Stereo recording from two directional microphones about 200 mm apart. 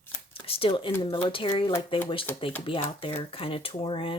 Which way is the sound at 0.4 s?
30° left (ahead or behind).